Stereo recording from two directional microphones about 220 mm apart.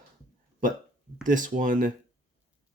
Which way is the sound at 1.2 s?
35° right (ahead or behind).